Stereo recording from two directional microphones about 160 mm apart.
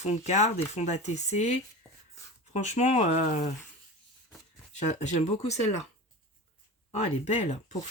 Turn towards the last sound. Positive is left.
turn(degrees=40)  # may be behind; listen again after turning